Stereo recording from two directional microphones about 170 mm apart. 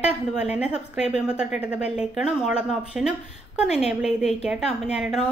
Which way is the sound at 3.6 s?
40° left (ahead or behind).